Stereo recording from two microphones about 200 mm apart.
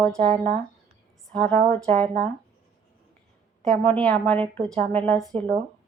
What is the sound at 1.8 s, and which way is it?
Speech, 5° left (ahead or behind).